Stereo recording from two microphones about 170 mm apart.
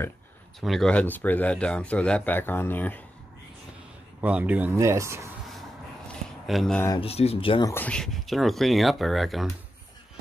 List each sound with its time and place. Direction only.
0.6 s speech: centre (ahead or behind)
4.2 s speech: 10° right (ahead or behind)
6.4 s speech: centre (ahead or behind)
7.0 s speech: 35° left (ahead or behind)
7.6 s speech: 10° left (ahead or behind)